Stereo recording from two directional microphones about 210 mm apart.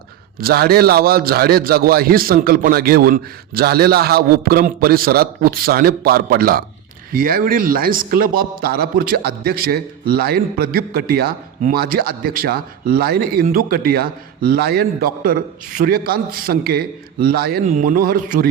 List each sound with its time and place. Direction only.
0.3 s a man's voice: 45° right (ahead or behind)